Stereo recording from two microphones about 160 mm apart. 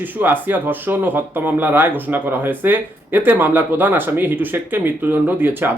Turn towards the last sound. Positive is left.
turn(degrees=-10)  # may be behind; listen again after turning